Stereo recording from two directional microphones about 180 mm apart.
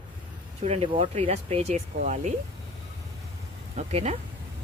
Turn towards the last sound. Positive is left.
turn(degrees=-35)  # may be behind; listen again after turning